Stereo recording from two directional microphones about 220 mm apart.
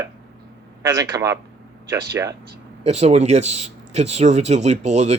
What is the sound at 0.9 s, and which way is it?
A man's voice, 15° right (ahead or behind).